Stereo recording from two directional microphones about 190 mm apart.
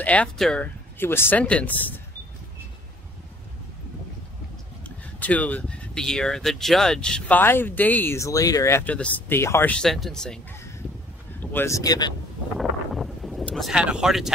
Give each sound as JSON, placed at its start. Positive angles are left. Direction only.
{"t": 0.0, "sound": "speech", "side_deg": 5}
{"t": 4.8, "sound": "speech", "side_deg": 10}
{"t": 12.5, "sound": "a sound", "side_deg": 0}